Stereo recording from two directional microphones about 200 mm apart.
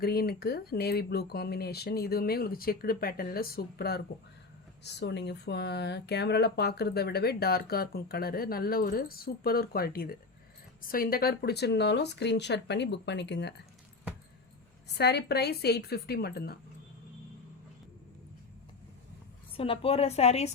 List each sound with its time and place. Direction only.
0.0 s speech: 50° left (ahead or behind)
14.9 s speech: 55° left (ahead or behind)
19.5 s a woman's voice: 25° left (ahead or behind)